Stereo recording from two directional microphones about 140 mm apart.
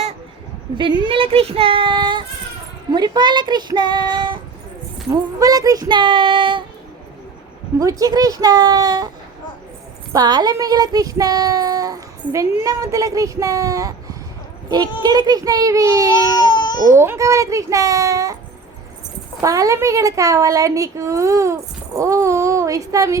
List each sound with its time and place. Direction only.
1.0 s speech: 40° right (ahead or behind)
5.4 s speech: 25° right (ahead or behind)
7.8 s a woman's voice: 25° right (ahead or behind)
10.1 s a woman's voice: 30° right (ahead or behind)
16.1 s baby cry: 30° left (ahead or behind)
16.9 s a woman's voice: 20° right (ahead or behind)
19.4 s a woman's voice: 25° right (ahead or behind)